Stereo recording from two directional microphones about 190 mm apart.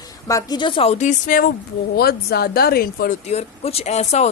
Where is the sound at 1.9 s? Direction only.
55° left (ahead or behind).